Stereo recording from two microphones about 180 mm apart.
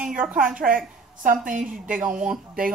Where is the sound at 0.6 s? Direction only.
50° right (ahead or behind).